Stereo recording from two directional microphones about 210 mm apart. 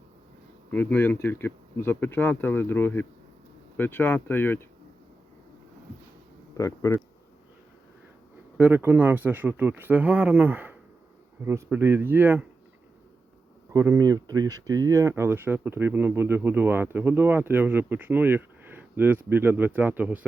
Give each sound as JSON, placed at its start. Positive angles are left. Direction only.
{"t": 0.7, "sound": "speech", "side_deg": 10}
{"t": 6.6, "sound": "speech", "side_deg": 15}
{"t": 8.5, "sound": "speech", "side_deg": -10}
{"t": 13.7, "sound": "speech", "side_deg": -15}